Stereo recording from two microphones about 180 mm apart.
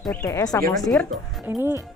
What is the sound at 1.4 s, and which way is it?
Speech, 15° right (ahead or behind).